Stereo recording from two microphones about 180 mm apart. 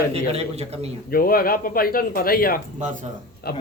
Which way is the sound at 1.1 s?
55° left (ahead or behind).